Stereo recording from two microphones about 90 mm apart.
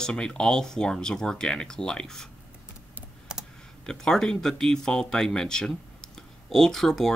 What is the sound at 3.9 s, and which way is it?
Speech, 5° left (ahead or behind).